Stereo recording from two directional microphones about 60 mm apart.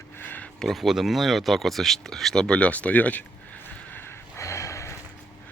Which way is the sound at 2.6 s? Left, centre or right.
Left.